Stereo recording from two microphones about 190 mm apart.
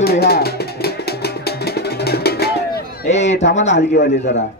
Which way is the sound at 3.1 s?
35° left (ahead or behind).